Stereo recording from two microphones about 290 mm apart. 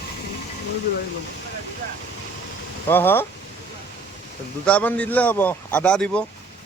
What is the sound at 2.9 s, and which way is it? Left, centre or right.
Speech, centre.